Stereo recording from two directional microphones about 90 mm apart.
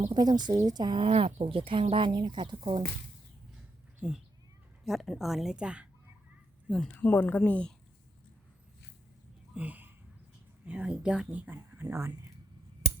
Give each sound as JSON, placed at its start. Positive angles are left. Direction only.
{"t": 0.1, "sound": "speech", "side_deg": -50}
{"t": 1.0, "sound": "speech", "side_deg": -90}
{"t": 4.0, "sound": "speech", "side_deg": -10}
{"t": 4.9, "sound": "a woman's voice", "side_deg": 0}
{"t": 6.9, "sound": "speech", "side_deg": 20}
{"t": 9.6, "sound": "a sound", "side_deg": -20}
{"t": 10.7, "sound": "speech", "side_deg": -15}